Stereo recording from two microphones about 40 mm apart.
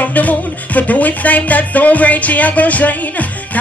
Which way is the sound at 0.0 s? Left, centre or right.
Left.